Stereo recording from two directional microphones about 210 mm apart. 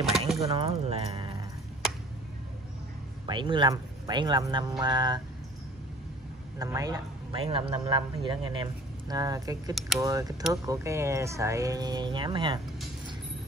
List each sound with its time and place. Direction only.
0.4 s speech: 30° right (ahead or behind)
3.3 s speech: 20° right (ahead or behind)
6.6 s speech: 15° right (ahead or behind)